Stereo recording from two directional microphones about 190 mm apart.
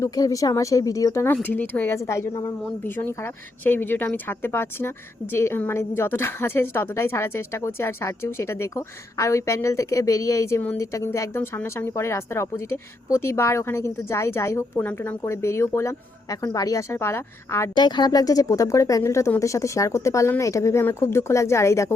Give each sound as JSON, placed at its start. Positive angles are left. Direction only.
{"t": 0.0, "sound": "speech", "side_deg": 15}
{"t": 17.7, "sound": "speech", "side_deg": 25}